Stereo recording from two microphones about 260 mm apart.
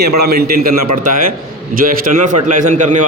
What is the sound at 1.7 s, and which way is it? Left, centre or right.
Speech, right.